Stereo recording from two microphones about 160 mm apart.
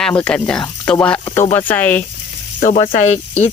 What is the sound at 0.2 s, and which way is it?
Speech, 5° left (ahead or behind).